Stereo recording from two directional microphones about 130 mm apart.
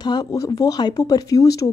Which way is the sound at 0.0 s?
30° left (ahead or behind).